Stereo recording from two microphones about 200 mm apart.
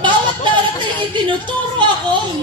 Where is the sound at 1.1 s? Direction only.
25° right (ahead or behind).